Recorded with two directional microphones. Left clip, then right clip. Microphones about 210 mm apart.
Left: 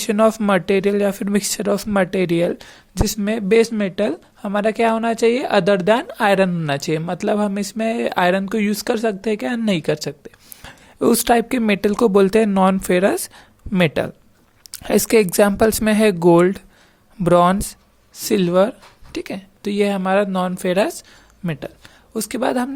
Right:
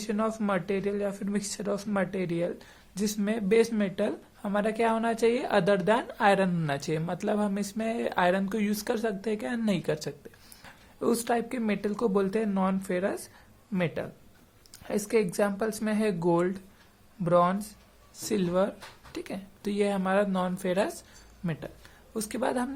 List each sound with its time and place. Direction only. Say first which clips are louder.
0.0 s speech: left 14 dB; 40° left (ahead or behind)